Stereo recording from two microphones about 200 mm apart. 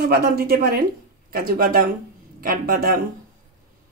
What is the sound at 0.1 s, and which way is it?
Speech, 50° right (ahead or behind).